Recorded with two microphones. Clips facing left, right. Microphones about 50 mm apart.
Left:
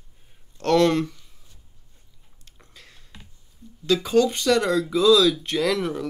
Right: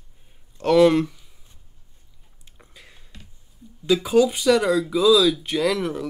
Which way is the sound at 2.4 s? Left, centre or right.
Centre.